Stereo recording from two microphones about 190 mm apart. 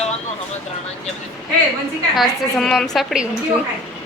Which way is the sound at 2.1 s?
Centre (ahead or behind).